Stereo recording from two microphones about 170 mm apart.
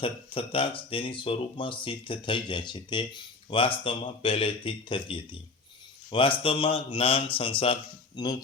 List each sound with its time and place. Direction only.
0.0 s speech: 30° left (ahead or behind)